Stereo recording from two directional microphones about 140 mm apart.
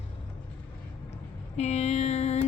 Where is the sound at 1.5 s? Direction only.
55° left (ahead or behind).